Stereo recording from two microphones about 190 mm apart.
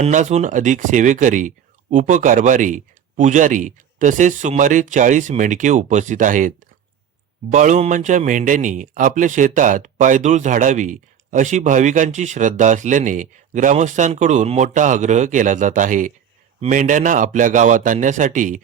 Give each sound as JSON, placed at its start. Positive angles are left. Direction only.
{"t": 0.0, "sound": "a man's voice", "side_deg": -40}
{"t": 7.5, "sound": "a man's voice", "side_deg": -40}